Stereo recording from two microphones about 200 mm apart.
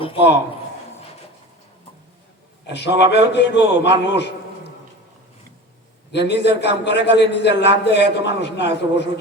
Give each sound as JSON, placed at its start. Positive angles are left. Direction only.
{"t": 2.6, "sound": "a man's voice", "side_deg": 60}
{"t": 6.1, "sound": "a man's voice", "side_deg": 60}